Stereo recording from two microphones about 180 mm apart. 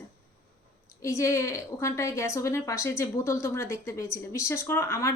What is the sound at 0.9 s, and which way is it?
A woman's voice, 15° left (ahead or behind).